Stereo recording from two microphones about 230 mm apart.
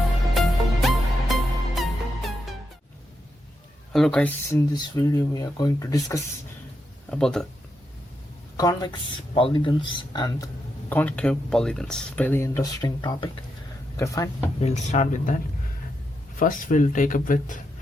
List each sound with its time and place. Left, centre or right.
0.3 s music: centre
3.9 s speech: centre
4.7 s speech: centre
7.1 s speech: centre
8.5 s speech: centre
14.6 s speech: left
16.4 s speech: left